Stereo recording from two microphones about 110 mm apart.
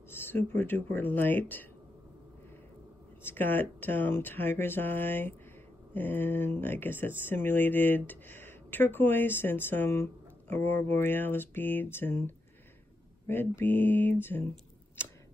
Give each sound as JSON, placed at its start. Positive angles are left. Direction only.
{"t": 0.1, "sound": "speech", "side_deg": 20}
{"t": 3.3, "sound": "speech", "side_deg": 20}